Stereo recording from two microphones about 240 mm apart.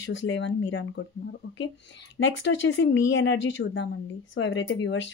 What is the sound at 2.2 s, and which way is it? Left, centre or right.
Speech, left.